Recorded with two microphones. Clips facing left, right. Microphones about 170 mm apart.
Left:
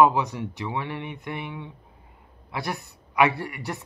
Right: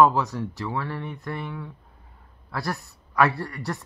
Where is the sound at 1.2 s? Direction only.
20° left (ahead or behind).